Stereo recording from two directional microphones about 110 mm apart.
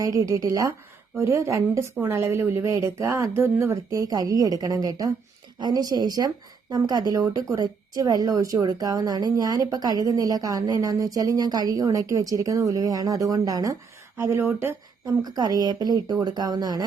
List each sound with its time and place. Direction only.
0.0 s a woman's voice: 30° right (ahead or behind)
14.2 s a woman's voice: 20° right (ahead or behind)
15.2 s a woman's voice: 35° right (ahead or behind)